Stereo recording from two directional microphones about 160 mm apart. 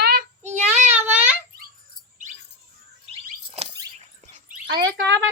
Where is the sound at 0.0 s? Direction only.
90° right.